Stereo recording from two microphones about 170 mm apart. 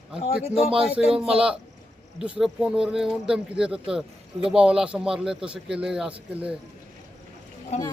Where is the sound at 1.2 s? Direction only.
35° right (ahead or behind).